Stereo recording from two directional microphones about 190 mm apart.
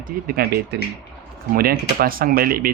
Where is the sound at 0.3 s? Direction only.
55° right (ahead or behind).